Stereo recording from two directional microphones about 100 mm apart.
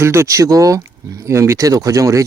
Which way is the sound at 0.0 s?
25° right (ahead or behind).